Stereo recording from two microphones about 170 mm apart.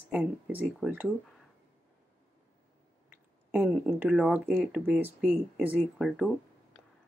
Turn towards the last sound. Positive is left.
turn(degrees=5)  # may be behind; listen again after turning